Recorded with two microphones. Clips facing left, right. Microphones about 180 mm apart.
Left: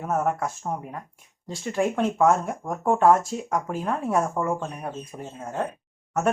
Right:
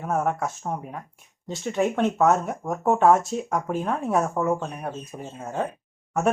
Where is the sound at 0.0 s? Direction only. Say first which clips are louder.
Even; centre (ahead or behind).